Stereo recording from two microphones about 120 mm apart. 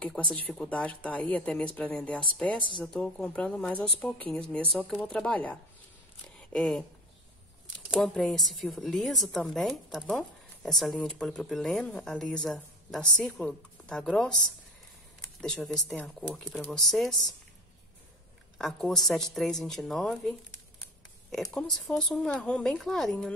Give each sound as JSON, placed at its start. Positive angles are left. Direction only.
{"t": 0.0, "sound": "speech", "side_deg": 5}
{"t": 6.2, "sound": "a sound", "side_deg": 5}
{"t": 8.0, "sound": "speech", "side_deg": 5}
{"t": 15.4, "sound": "speech", "side_deg": 5}
{"t": 18.6, "sound": "speech", "side_deg": 0}